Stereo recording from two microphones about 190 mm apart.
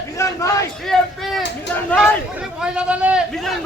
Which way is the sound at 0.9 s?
5° left (ahead or behind).